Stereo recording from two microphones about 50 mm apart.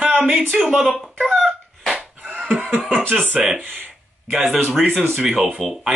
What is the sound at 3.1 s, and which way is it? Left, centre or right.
Speech, centre.